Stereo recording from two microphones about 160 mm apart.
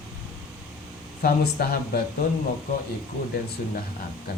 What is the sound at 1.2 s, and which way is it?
Speech, 75° left (ahead or behind).